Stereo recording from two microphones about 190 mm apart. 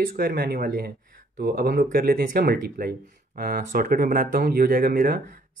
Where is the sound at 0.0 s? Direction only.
50° right (ahead or behind).